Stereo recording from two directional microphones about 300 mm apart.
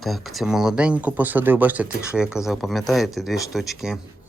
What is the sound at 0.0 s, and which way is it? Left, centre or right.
Speech, centre.